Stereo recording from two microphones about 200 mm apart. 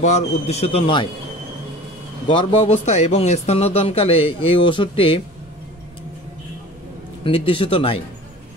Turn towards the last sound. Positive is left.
turn(degrees=30)  # may be behind; listen again after turning